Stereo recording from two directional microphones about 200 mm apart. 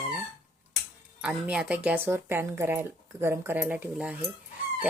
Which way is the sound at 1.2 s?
5° right (ahead or behind).